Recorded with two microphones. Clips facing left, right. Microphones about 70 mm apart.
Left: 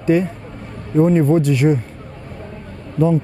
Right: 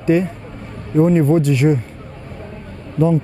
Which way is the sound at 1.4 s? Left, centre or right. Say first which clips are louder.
Even; centre.